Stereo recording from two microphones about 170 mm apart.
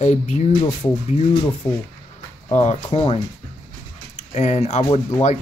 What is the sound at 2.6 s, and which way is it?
Speech, 35° left (ahead or behind).